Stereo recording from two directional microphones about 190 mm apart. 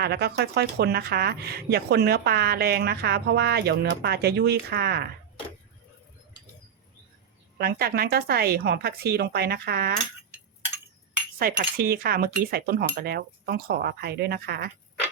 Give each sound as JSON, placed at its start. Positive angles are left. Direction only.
{"t": 0.0, "sound": "speech", "side_deg": -60}
{"t": 7.6, "sound": "speech", "side_deg": -55}
{"t": 11.3, "sound": "cutlery", "side_deg": -50}